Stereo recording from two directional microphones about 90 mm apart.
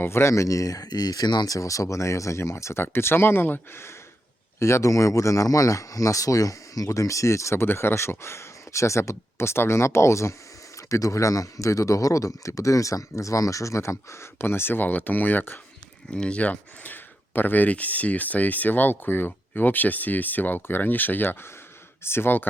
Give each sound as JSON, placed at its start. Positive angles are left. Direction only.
{"t": 0.0, "sound": "speech", "side_deg": 30}